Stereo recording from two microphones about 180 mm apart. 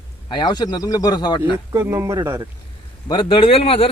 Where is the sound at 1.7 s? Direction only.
15° right (ahead or behind).